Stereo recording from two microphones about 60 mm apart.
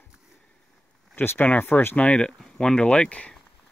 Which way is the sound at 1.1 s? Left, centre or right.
Left.